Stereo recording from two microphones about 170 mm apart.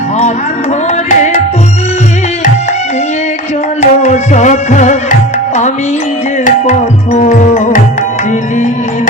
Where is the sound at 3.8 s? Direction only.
45° left (ahead or behind).